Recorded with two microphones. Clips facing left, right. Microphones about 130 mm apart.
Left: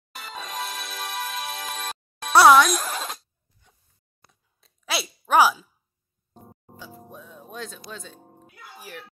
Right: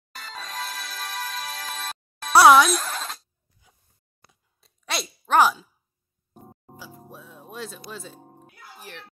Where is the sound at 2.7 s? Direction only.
10° left (ahead or behind).